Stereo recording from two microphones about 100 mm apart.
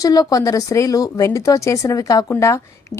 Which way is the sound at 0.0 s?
40° left (ahead or behind).